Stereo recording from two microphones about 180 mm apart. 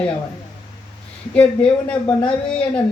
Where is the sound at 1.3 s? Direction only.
5° left (ahead or behind).